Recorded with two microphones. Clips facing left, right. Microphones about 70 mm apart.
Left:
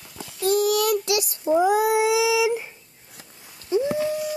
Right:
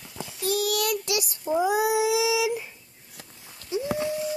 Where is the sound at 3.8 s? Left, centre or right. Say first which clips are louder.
Left 4 dB; right.